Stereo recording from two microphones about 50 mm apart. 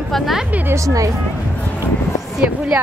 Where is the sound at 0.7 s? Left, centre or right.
Right.